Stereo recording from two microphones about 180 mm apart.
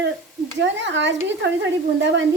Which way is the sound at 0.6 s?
85° right.